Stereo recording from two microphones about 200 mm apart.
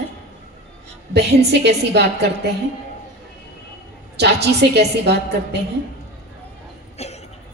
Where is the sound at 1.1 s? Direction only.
55° right (ahead or behind).